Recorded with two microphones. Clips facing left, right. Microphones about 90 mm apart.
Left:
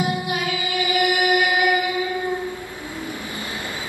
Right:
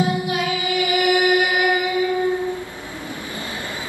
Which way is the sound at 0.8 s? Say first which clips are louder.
Right 2 dB; 20° right (ahead or behind).